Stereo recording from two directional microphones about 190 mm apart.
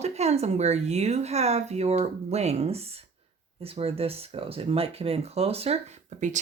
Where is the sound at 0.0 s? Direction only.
35° right (ahead or behind).